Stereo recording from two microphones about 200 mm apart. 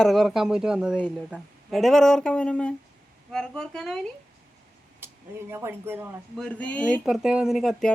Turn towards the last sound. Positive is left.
turn(degrees=0)  # may be behind; listen again after turning